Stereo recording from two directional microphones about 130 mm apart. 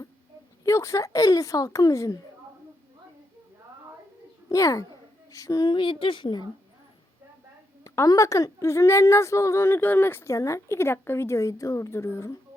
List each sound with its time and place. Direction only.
0.6 s speech: 25° left (ahead or behind)
4.4 s a child's voice: 25° left (ahead or behind)
7.9 s speech: 25° left (ahead or behind)